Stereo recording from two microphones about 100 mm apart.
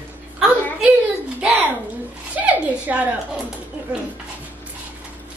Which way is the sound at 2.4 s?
15° right (ahead or behind).